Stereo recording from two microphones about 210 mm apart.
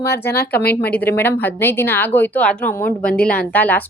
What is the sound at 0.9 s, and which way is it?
A woman's voice, 10° left (ahead or behind).